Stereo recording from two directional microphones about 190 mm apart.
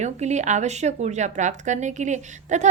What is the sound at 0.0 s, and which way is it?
Speech, 35° right (ahead or behind).